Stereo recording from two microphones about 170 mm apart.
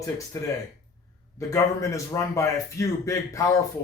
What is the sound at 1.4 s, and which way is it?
A man's voice, 20° left (ahead or behind).